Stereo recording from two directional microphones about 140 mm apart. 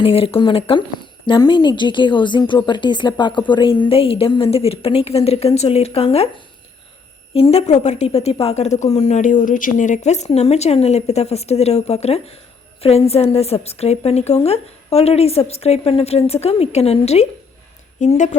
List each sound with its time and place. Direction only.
0.0 s a woman's voice: 40° left (ahead or behind)